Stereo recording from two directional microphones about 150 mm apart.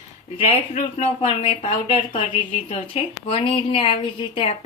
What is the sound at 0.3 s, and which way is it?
Speech, 45° left (ahead or behind).